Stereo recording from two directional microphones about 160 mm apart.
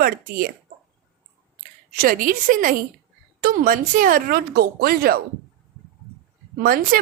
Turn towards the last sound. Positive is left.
turn(degrees=-65)  # may be behind; listen again after turning